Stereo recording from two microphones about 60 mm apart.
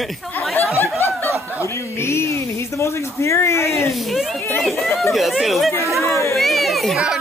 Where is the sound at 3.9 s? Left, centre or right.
Centre.